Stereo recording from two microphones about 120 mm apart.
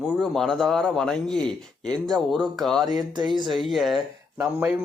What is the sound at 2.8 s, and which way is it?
Speech, 35° right (ahead or behind).